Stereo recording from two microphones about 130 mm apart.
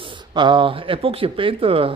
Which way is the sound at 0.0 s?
40° right (ahead or behind).